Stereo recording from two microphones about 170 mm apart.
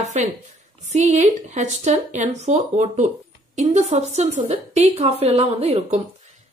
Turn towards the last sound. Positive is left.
turn(degrees=-35)  # may be behind; listen again after turning